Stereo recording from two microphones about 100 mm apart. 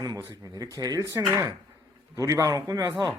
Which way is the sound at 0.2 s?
40° right (ahead or behind).